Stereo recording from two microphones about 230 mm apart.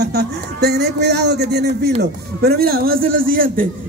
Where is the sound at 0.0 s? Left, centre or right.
Right.